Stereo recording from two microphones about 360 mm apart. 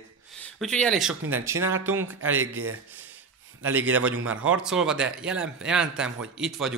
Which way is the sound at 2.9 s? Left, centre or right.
Centre.